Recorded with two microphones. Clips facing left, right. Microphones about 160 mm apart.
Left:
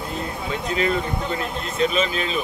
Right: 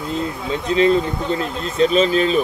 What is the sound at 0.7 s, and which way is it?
Speech, 30° right (ahead or behind).